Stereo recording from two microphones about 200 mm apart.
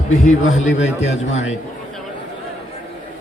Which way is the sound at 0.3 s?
35° left (ahead or behind).